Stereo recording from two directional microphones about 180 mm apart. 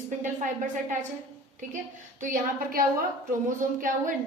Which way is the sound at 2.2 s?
50° right (ahead or behind).